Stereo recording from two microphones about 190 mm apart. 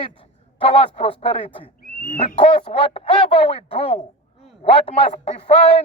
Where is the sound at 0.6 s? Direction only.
30° left (ahead or behind).